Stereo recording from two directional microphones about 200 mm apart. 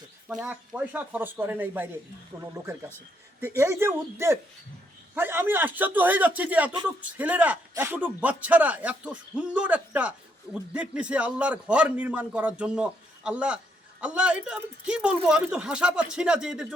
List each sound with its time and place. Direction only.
0.3 s speech: 5° right (ahead or behind)